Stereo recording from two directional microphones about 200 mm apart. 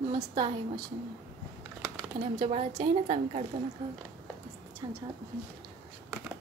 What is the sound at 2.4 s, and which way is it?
A woman's voice, 30° right (ahead or behind).